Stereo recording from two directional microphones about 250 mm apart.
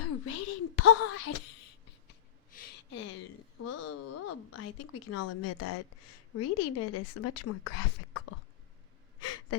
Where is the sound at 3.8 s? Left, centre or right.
Left.